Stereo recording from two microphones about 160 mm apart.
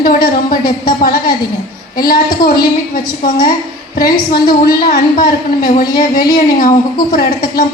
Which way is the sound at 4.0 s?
65° left (ahead or behind).